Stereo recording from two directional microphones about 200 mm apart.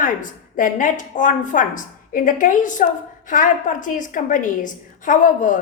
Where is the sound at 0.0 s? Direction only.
40° left (ahead or behind).